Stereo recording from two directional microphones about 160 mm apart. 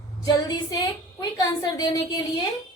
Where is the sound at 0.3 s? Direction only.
25° left (ahead or behind).